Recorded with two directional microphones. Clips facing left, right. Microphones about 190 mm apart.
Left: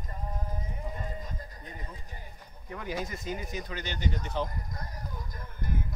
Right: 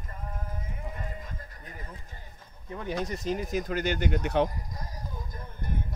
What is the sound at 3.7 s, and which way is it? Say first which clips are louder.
Speech: right 6 dB; 50° right (ahead or behind).